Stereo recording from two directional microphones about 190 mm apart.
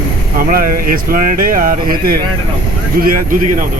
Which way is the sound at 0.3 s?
50° right (ahead or behind).